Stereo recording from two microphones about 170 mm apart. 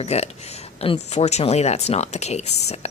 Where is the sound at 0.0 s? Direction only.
40° left (ahead or behind).